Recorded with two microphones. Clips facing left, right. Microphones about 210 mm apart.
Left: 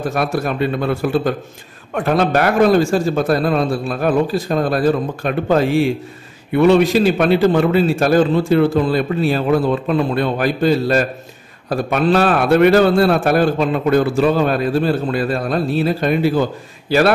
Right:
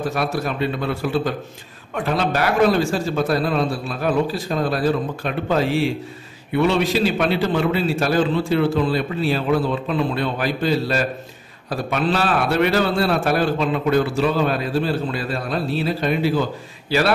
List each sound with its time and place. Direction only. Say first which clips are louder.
0.1 s a man's voice: left 4 dB; 50° left (ahead or behind)